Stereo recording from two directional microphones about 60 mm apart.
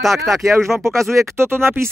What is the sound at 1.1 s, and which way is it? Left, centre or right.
Speech, right.